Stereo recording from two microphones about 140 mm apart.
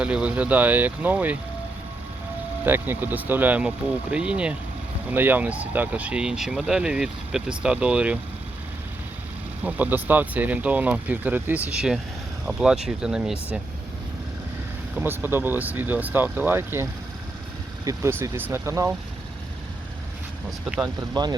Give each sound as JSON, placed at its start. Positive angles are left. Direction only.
{"t": 0.0, "sound": "speech", "side_deg": -10}
{"t": 2.6, "sound": "speech", "side_deg": -15}
{"t": 9.6, "sound": "speech", "side_deg": -10}
{"t": 14.9, "sound": "speech", "side_deg": -15}
{"t": 20.8, "sound": "speech", "side_deg": -30}